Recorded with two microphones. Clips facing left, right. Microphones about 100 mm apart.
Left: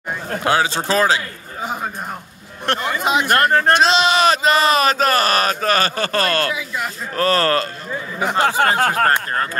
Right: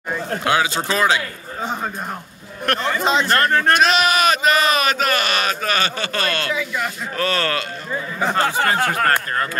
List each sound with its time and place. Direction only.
0.4 s a man's voice: 35° left (ahead or behind)
1.6 s a sound: 10° left (ahead or behind)
2.8 s speech: 10° left (ahead or behind)
3.5 s a man's voice: 35° left (ahead or behind)
8.2 s speech: 10° left (ahead or behind)
8.5 s a man's voice: 30° left (ahead or behind)